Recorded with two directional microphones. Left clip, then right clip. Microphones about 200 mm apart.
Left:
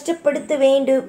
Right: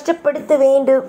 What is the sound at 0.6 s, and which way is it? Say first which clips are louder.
Speech: right 2 dB; 20° right (ahead or behind).